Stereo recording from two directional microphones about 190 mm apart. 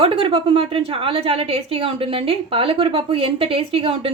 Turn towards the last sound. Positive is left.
turn(degrees=-30)  # may be behind; listen again after turning